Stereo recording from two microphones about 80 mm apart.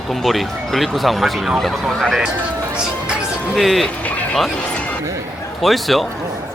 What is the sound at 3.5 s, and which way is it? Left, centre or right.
Speech, centre.